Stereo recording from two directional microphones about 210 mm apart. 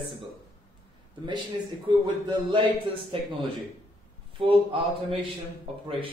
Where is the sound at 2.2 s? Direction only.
20° right (ahead or behind).